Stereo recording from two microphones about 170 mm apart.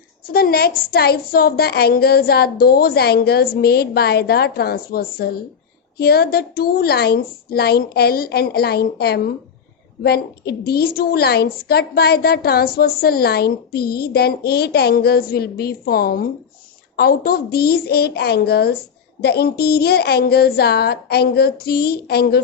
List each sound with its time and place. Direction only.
0.3 s a woman's voice: 60° left (ahead or behind)